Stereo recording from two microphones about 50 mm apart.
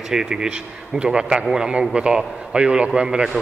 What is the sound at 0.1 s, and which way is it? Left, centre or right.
A man's voice, centre.